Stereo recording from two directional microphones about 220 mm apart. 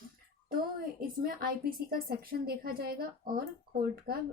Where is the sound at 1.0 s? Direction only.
40° right (ahead or behind).